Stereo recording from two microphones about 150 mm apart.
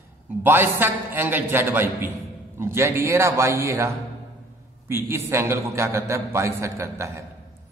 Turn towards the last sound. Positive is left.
turn(degrees=-20)  # may be behind; listen again after turning